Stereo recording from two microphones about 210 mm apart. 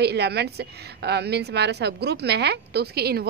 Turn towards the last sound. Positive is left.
turn(degrees=-50)  # may be behind; listen again after turning